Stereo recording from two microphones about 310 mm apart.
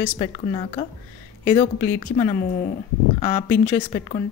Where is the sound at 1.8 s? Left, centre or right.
Centre.